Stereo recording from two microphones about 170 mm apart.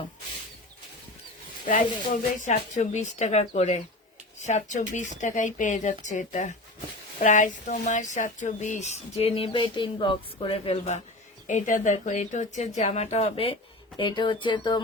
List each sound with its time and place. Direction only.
1.6 s a woman's voice: 50° left (ahead or behind); by 14.8 s 30° left (ahead or behind)